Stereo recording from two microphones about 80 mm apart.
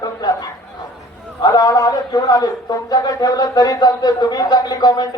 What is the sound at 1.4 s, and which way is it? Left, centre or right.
A man's voice, left.